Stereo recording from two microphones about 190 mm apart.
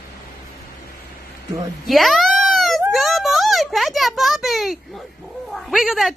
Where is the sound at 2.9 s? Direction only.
Centre (ahead or behind).